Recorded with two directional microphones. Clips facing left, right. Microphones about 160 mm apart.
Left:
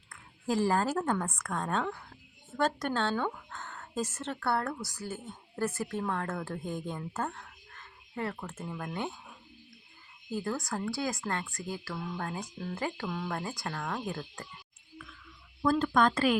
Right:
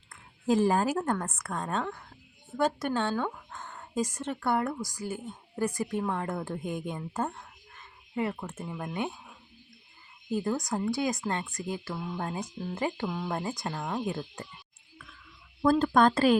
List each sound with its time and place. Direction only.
0.1 s a woman's voice: 20° right (ahead or behind)
10.3 s speech: 20° right (ahead or behind)
15.6 s speech: 35° right (ahead or behind)